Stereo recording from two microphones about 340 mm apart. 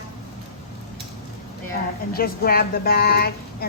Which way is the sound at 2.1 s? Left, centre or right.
Left.